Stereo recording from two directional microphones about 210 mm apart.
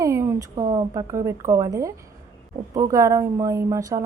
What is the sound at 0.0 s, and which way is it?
A woman's voice, 15° right (ahead or behind).